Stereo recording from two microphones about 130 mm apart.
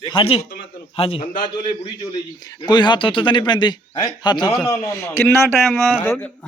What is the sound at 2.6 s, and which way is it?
A man's voice, 35° left (ahead or behind).